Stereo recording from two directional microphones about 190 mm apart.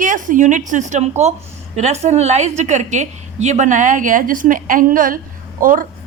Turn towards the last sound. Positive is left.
turn(degrees=-45)  # may be behind; listen again after turning